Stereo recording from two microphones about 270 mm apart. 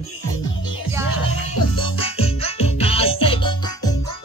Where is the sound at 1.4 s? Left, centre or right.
Left.